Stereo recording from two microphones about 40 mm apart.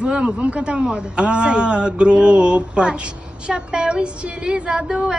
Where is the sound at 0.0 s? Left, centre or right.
Right.